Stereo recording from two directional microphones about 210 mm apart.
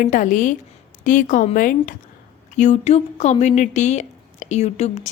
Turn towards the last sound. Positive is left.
turn(degrees=30)  # may be behind; listen again after turning